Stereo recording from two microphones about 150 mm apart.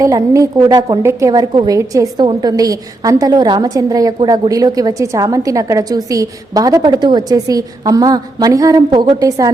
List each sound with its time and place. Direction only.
0.0 s a woman's voice: 25° right (ahead or behind)